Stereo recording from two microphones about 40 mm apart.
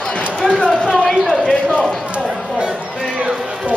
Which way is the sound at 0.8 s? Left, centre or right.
Centre.